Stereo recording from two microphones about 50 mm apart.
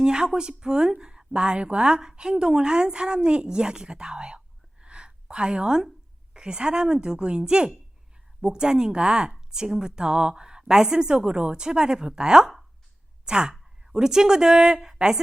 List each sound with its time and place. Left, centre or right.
0.0 s a woman's voice: centre